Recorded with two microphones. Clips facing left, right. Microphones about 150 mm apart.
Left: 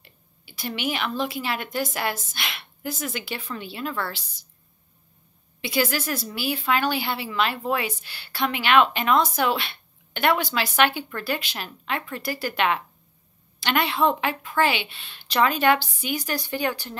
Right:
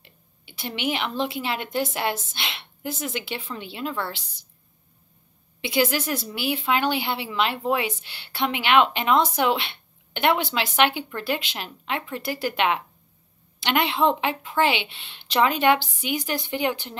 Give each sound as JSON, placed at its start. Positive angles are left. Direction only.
{"t": 0.0, "sound": "a woman's voice", "side_deg": -20}
{"t": 5.6, "sound": "a woman's voice", "side_deg": -20}